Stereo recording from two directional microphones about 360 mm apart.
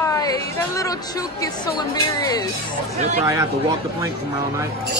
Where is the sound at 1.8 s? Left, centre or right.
Centre.